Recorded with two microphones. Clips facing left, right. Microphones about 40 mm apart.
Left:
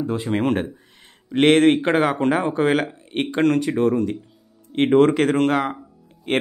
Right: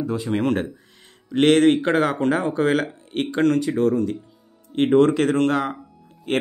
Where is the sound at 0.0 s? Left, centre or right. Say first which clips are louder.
Left 1 dB; left.